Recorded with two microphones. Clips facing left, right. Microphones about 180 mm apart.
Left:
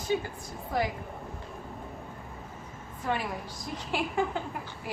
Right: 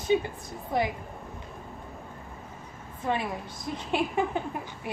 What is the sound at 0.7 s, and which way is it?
Speech, 20° right (ahead or behind).